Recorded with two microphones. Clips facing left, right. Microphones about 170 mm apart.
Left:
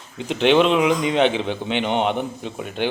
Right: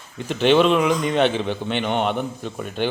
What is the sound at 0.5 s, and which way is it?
A man's voice, 10° left (ahead or behind).